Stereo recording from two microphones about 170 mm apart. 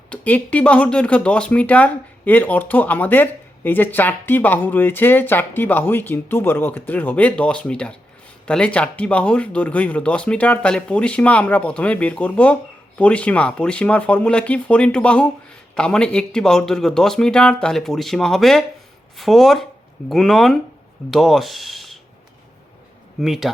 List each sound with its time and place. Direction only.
0.1 s a man's voice: 10° left (ahead or behind)
23.2 s a man's voice: centre (ahead or behind)